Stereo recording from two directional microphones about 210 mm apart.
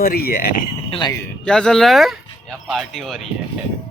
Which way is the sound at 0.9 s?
20° left (ahead or behind).